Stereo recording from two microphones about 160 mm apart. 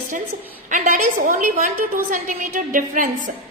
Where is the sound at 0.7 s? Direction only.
55° right (ahead or behind).